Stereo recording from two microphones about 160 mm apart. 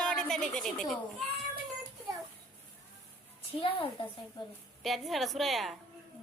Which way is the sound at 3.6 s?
35° left (ahead or behind).